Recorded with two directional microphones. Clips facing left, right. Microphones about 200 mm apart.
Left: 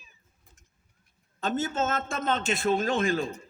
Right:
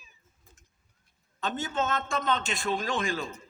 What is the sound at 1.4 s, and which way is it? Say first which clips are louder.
A man's voice: left 3 dB; 40° left (ahead or behind).